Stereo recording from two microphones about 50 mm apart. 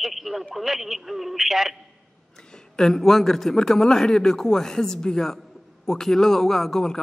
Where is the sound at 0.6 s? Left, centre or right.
Centre.